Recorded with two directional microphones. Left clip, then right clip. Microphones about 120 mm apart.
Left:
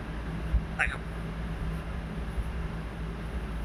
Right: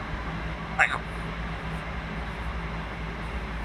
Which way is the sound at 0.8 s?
35° left (ahead or behind).